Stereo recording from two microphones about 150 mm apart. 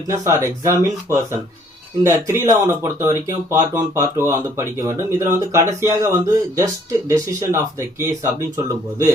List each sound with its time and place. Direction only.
0.6 s speech: 15° right (ahead or behind)